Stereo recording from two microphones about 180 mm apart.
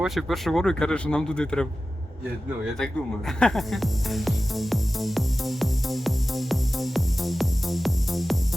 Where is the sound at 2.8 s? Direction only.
5° left (ahead or behind).